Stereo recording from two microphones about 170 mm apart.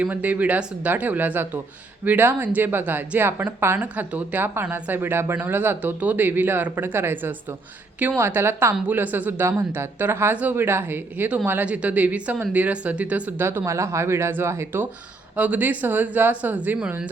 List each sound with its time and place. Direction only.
0.0 s a woman's voice: 10° right (ahead or behind)